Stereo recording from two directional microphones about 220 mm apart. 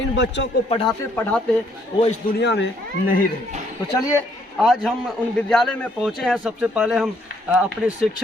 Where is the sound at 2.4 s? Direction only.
50° left (ahead or behind).